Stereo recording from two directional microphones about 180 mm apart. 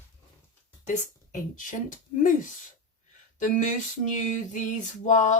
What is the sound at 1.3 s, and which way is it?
Speech, 50° left (ahead or behind).